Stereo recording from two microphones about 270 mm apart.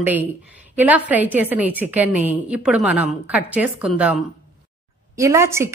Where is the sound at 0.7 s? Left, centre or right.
Centre.